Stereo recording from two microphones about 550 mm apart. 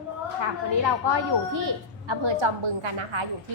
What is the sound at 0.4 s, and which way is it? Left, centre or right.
A woman's voice, right.